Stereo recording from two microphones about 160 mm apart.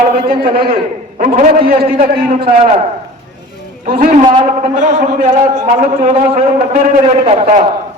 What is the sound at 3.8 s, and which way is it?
A man's voice, 55° right (ahead or behind).